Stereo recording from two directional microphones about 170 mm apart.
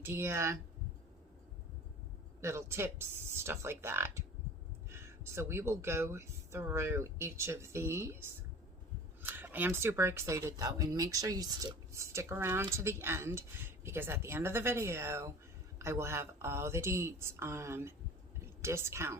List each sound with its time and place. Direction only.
0.0 s speech: 15° right (ahead or behind)
2.4 s speech: 15° right (ahead or behind)
18.3 s a sound: 15° right (ahead or behind)